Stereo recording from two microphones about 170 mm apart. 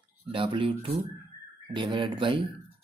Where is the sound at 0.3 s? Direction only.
30° right (ahead or behind).